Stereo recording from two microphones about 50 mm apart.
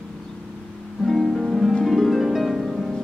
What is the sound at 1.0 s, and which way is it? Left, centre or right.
Music, centre.